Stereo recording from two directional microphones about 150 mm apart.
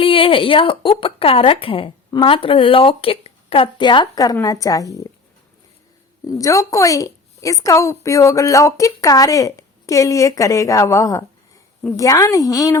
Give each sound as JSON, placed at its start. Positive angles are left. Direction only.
{"t": 0.0, "sound": "speech", "side_deg": 35}
{"t": 6.2, "sound": "a woman's voice", "side_deg": 20}